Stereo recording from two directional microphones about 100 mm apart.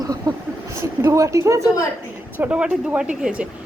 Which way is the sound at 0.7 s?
25° right (ahead or behind).